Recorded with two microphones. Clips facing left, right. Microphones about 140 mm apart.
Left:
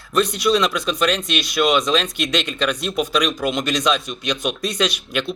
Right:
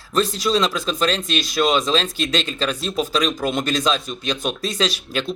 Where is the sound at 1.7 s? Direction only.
30° right (ahead or behind).